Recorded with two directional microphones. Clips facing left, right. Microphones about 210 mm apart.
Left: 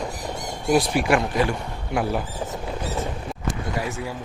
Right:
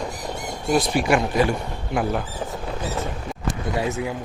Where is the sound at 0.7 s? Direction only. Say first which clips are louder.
Even; 5° left (ahead or behind).